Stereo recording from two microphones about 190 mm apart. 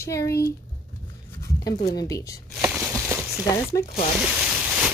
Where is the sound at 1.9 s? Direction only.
20° left (ahead or behind).